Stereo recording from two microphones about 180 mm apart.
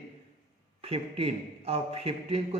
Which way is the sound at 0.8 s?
35° right (ahead or behind).